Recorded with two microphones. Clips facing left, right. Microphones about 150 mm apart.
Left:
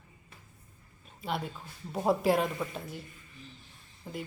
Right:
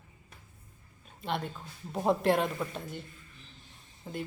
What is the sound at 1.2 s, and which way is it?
A woman's voice, 5° left (ahead or behind).